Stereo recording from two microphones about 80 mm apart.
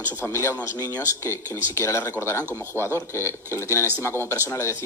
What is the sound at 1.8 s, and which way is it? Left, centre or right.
A man's voice, left.